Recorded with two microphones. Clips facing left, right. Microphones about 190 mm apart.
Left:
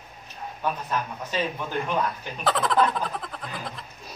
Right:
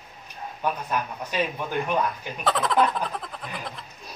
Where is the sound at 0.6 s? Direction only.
10° right (ahead or behind).